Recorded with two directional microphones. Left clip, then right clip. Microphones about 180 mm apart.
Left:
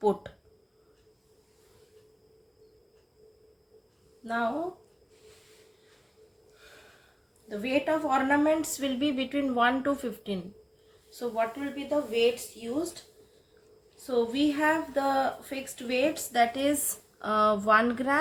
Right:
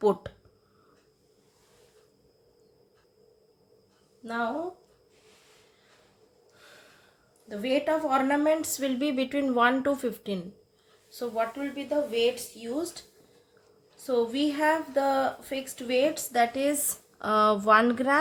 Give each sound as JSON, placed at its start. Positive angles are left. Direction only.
{"t": 0.0, "sound": "a woman's voice", "side_deg": -25}
{"t": 4.2, "sound": "a sound", "side_deg": -15}
{"t": 7.4, "sound": "a woman's voice", "side_deg": -15}
{"t": 11.9, "sound": "a woman's voice", "side_deg": -20}
{"t": 14.1, "sound": "a woman's voice", "side_deg": -20}